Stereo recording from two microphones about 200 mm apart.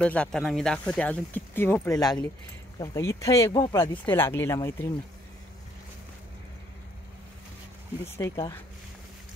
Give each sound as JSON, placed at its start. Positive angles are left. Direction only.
{"t": 0.0, "sound": "speech", "side_deg": 5}
{"t": 4.0, "sound": "speech", "side_deg": 10}
{"t": 8.2, "sound": "speech", "side_deg": 15}